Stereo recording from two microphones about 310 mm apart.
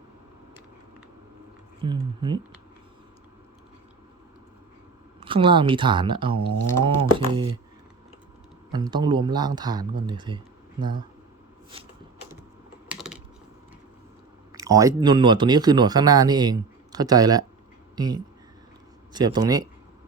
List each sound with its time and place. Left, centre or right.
1.8 s speech: centre
5.2 s speech: centre
8.7 s speech: centre
12.9 s typing: centre
14.5 s speech: centre